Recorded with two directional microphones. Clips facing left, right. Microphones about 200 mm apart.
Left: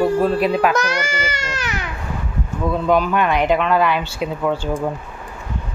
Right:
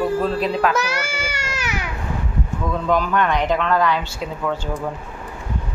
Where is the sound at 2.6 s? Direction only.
10° left (ahead or behind).